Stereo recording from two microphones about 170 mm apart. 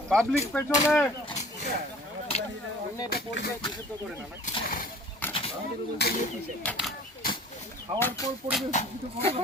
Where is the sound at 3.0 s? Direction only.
65° left (ahead or behind).